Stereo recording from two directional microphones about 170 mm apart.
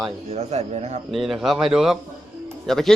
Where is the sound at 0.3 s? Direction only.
40° right (ahead or behind).